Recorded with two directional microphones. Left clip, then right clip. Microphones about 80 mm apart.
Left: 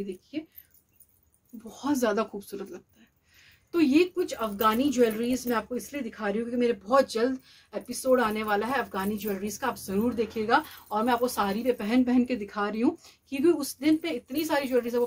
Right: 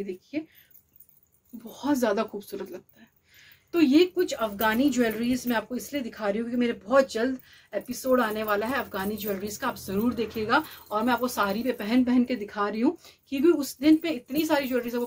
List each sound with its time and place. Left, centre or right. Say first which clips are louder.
1.7 s a woman's voice: right 1 dB; left
12.0 s a woman's voice: right 1 dB; left